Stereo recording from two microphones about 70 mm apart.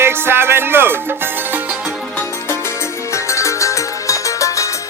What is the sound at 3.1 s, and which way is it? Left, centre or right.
Music, left.